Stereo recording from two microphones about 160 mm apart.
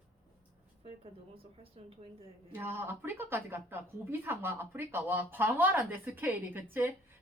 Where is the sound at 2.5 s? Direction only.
15° right (ahead or behind).